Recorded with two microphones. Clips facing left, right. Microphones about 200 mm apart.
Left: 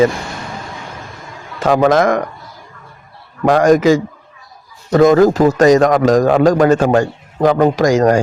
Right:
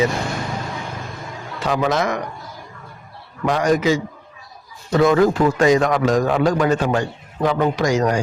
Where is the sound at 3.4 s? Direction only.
50° left (ahead or behind).